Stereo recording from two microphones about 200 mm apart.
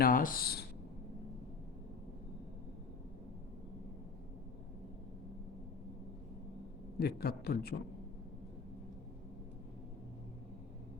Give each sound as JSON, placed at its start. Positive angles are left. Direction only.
{"t": 0.0, "sound": "a man's voice", "side_deg": 45}
{"t": 7.0, "sound": "a man's voice", "side_deg": 50}